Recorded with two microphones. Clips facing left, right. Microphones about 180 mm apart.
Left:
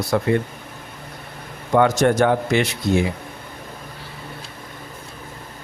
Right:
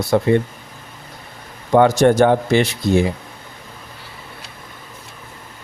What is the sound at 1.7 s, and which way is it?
Speech, 30° right (ahead or behind).